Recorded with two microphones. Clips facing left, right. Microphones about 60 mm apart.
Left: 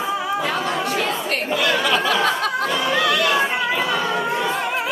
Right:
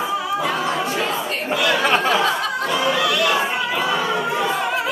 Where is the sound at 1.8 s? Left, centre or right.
Right.